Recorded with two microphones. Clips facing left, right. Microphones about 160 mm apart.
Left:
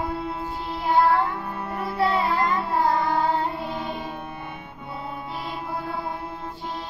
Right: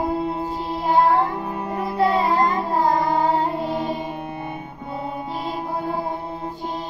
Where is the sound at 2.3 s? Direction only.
35° right (ahead or behind).